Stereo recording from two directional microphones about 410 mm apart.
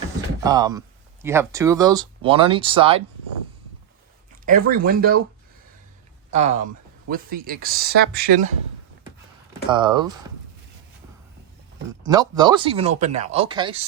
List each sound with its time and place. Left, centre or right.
0.4 s speech: centre
4.7 s speech: right
6.3 s speech: centre
9.6 s speech: centre
12.0 s speech: centre